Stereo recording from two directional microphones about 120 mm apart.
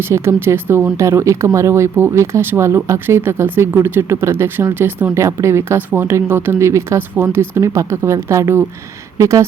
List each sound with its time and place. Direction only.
0.1 s speech: 20° right (ahead or behind)